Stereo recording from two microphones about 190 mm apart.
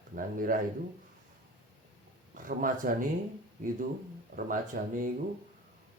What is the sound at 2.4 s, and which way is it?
Speech, 45° right (ahead or behind).